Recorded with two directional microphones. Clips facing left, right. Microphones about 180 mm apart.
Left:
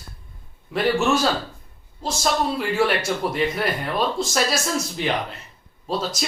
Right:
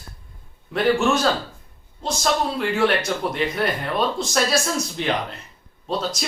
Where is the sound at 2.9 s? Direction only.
Centre (ahead or behind).